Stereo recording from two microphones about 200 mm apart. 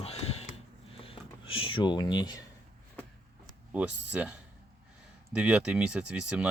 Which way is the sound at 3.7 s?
5° right (ahead or behind).